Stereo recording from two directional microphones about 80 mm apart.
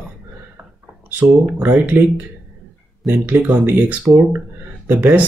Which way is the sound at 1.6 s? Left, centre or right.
Right.